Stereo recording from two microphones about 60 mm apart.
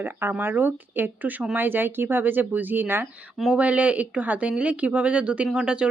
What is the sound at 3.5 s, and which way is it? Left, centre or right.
Speech, right.